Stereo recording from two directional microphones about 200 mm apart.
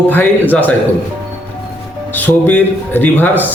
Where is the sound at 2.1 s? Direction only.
10° left (ahead or behind).